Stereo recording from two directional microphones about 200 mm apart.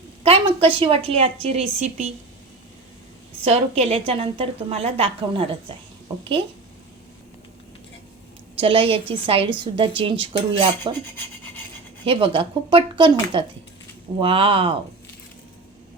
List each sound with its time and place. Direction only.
0.2 s a woman's voice: 30° right (ahead or behind)
3.4 s a woman's voice: 30° right (ahead or behind)
8.5 s a woman's voice: 25° right (ahead or behind)
12.0 s a woman's voice: 25° right (ahead or behind)